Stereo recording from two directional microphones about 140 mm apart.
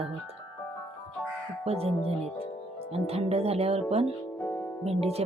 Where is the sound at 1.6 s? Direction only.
45° right (ahead or behind).